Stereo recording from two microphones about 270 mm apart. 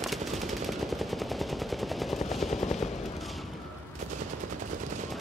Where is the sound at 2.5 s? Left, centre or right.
Left.